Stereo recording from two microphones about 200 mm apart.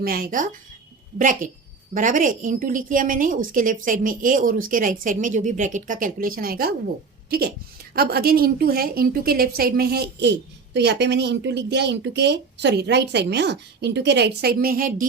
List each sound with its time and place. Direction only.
0.0 s a woman's voice: 45° right (ahead or behind)